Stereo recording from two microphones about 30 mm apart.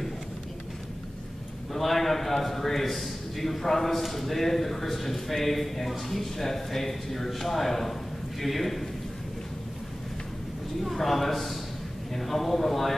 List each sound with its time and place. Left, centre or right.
1.7 s a man's voice: centre
10.8 s a man's voice: centre